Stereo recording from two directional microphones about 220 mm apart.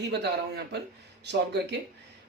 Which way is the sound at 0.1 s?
50° right (ahead or behind).